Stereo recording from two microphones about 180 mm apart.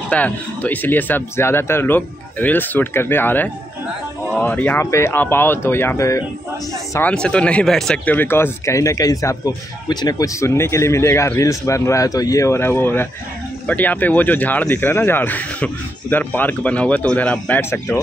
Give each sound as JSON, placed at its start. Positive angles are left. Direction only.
{"t": 0.1, "sound": "speech", "side_deg": 10}